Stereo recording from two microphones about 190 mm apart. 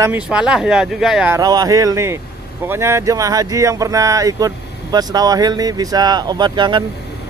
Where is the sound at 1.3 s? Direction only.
20° right (ahead or behind).